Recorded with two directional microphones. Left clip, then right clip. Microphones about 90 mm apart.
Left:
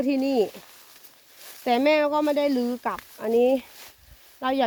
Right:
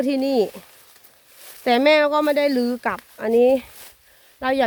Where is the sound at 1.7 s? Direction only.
85° right.